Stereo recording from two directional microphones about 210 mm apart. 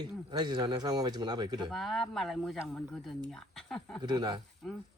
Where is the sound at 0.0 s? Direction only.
20° right (ahead or behind).